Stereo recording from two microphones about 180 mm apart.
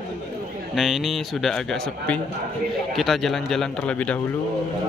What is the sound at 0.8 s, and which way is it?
A man's voice, centre (ahead or behind).